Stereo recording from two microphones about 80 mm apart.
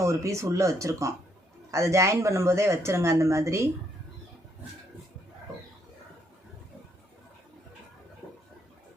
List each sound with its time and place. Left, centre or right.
0.0 s speech: right